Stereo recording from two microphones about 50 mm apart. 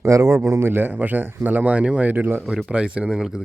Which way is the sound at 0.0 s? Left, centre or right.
Right.